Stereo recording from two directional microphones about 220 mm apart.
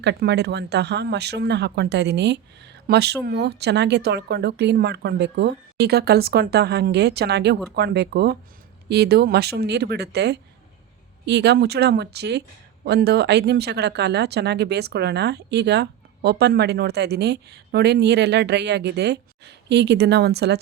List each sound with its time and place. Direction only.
0.0 s speech: 50° right (ahead or behind)